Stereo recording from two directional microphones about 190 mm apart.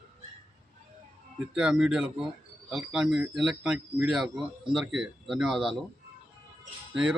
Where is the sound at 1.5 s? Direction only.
5° right (ahead or behind).